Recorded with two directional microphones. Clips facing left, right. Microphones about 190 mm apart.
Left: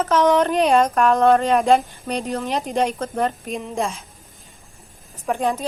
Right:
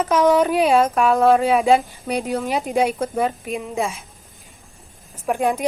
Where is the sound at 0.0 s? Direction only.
10° right (ahead or behind).